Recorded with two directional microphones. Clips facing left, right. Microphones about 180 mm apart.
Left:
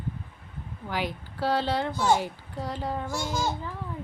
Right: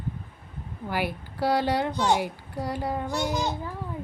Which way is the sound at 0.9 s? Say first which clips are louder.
Right 2 dB; 10° right (ahead or behind).